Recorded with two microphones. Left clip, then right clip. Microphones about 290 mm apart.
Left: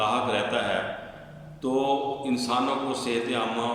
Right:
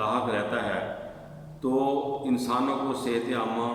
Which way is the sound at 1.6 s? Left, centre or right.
Centre.